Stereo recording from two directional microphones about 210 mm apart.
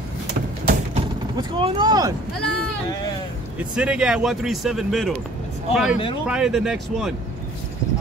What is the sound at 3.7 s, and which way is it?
Speech, 5° right (ahead or behind).